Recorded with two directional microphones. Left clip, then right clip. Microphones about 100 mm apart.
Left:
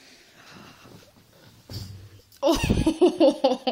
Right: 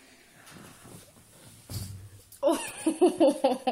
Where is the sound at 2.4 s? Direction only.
70° left (ahead or behind).